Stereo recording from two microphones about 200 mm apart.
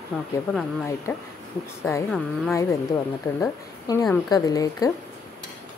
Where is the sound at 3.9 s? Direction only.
15° left (ahead or behind).